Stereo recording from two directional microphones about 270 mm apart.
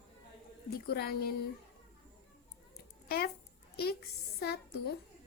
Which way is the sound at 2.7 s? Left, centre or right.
Left.